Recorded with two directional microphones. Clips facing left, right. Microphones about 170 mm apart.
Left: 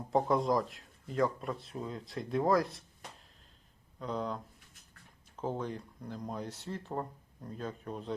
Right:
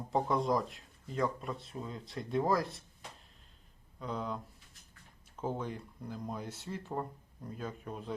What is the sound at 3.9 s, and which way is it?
Speech, centre (ahead or behind).